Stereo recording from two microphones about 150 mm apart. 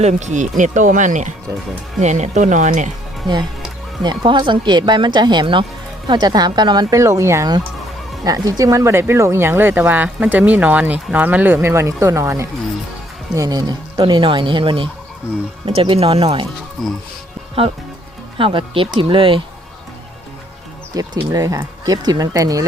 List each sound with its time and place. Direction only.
0.0 s speech: 50° right (ahead or behind)
4.0 s speech: 30° right (ahead or behind)
16.8 s speech: centre (ahead or behind)
17.6 s speech: 40° right (ahead or behind)
20.9 s speech: 25° right (ahead or behind)